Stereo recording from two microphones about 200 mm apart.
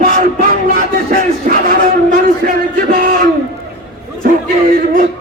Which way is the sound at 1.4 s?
45° right (ahead or behind).